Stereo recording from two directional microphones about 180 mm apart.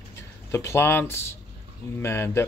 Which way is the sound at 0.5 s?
15° left (ahead or behind).